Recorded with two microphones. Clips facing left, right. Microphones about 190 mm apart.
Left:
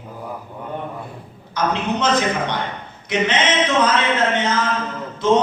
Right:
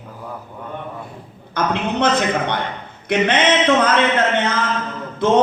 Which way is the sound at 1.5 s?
60° right (ahead or behind).